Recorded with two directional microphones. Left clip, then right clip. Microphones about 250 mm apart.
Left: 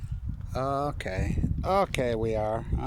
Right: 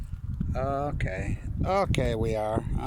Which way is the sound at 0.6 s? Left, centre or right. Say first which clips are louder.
Left 1 dB; centre.